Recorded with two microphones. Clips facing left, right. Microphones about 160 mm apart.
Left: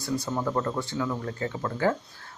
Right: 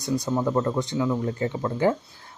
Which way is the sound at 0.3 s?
15° right (ahead or behind).